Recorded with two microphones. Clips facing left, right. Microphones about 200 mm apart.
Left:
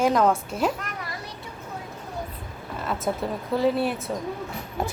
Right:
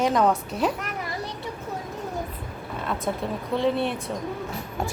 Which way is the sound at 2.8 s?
Centre (ahead or behind).